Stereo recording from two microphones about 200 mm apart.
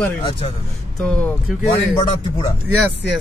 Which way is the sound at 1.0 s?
Centre (ahead or behind).